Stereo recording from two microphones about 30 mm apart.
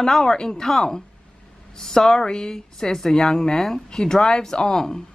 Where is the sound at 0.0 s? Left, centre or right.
Left.